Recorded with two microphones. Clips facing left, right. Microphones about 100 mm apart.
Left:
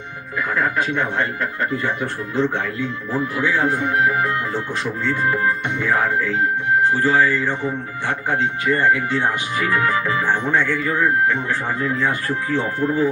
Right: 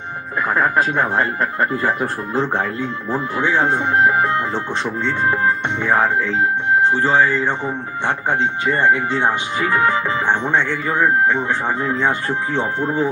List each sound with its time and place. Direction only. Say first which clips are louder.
0.3 s speech: right 3 dB; 35° right (ahead or behind)